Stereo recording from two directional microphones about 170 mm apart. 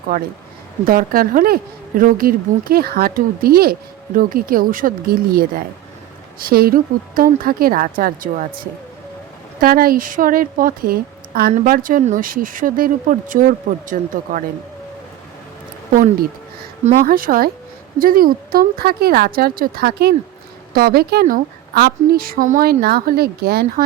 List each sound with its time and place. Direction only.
0.1 s speech: 55° right (ahead or behind)
15.9 s speech: 50° right (ahead or behind); by 23.8 s 65° right (ahead or behind)